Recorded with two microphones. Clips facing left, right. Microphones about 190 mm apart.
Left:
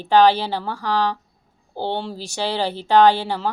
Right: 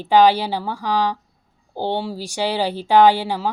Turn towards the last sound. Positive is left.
turn(degrees=-15)  # may be behind; listen again after turning